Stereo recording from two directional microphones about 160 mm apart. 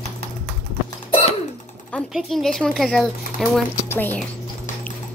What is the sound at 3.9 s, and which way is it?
Speech, 10° left (ahead or behind).